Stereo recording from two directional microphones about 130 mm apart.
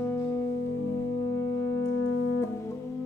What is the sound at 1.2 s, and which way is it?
Brass instrument, 25° left (ahead or behind).